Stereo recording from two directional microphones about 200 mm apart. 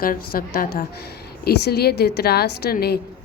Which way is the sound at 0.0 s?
45° left (ahead or behind).